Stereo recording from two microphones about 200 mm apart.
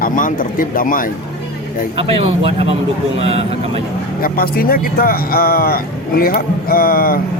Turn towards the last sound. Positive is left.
turn(degrees=45)  # may be behind; listen again after turning